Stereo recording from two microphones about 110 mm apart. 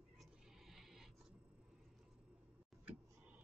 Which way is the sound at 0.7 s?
Centre (ahead or behind).